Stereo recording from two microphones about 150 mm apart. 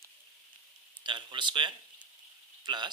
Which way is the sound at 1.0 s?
30° right (ahead or behind).